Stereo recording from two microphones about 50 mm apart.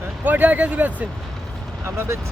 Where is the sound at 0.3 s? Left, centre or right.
Right.